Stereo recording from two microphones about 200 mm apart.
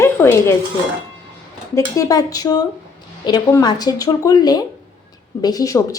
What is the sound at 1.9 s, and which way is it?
A woman's voice, 15° left (ahead or behind).